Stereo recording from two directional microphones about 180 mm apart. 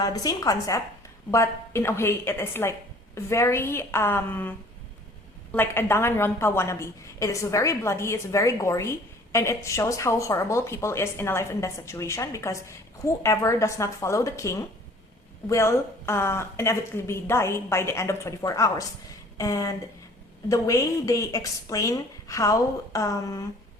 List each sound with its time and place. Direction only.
0.0 s a woman's voice: 20° left (ahead or behind)